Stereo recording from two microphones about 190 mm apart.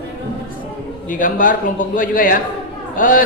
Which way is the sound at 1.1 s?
45° left (ahead or behind).